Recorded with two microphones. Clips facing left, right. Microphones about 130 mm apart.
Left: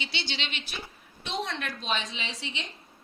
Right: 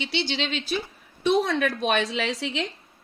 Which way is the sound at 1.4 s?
70° right (ahead or behind).